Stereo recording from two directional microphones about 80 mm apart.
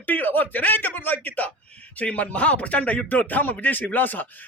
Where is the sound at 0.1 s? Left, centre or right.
Left.